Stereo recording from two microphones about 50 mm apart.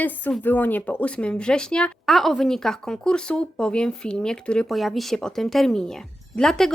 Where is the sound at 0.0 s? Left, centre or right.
Left; by 1.9 s centre.